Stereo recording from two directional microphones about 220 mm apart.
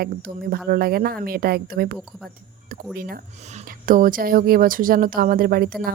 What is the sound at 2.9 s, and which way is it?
Speech, 45° right (ahead or behind).